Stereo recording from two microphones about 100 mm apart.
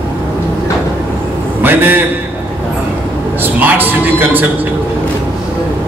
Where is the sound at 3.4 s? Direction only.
20° right (ahead or behind).